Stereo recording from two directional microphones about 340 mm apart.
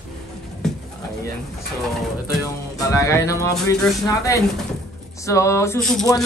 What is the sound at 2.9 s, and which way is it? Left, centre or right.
Speech, centre.